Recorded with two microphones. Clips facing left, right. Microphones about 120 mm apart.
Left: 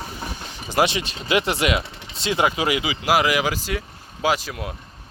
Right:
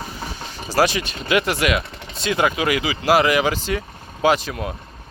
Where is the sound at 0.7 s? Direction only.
25° left (ahead or behind).